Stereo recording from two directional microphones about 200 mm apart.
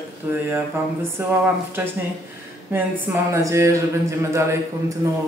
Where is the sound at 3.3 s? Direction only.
15° right (ahead or behind).